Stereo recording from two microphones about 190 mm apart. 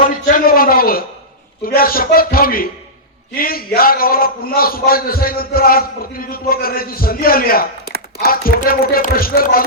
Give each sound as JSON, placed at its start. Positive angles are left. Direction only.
{"t": 0.0, "sound": "a man's voice", "side_deg": 45}